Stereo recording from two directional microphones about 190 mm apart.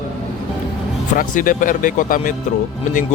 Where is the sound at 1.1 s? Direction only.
45° left (ahead or behind).